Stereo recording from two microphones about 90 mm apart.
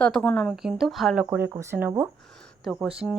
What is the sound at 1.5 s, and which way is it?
Speech, 35° right (ahead or behind).